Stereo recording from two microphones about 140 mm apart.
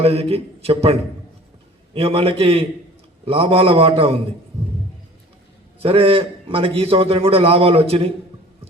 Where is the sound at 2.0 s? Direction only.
45° right (ahead or behind).